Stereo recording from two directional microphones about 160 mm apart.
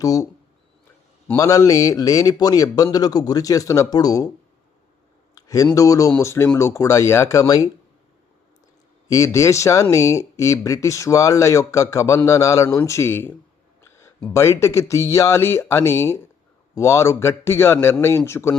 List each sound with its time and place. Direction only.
0.0 s speech: 20° left (ahead or behind)
1.3 s speech: 20° left (ahead or behind)
5.3 s a sound: 20° left (ahead or behind)
5.6 s speech: 20° left (ahead or behind)
9.0 s speech: 20° left (ahead or behind)